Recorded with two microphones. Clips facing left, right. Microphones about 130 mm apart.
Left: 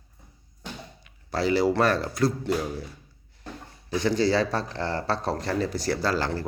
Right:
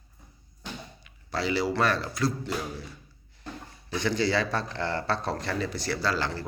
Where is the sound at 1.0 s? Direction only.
45° left (ahead or behind).